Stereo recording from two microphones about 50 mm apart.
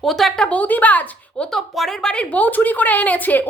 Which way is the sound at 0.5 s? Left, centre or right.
Left.